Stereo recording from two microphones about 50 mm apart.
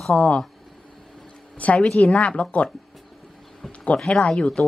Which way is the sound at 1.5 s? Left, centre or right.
Left.